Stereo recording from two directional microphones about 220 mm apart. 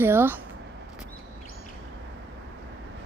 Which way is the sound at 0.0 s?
10° right (ahead or behind).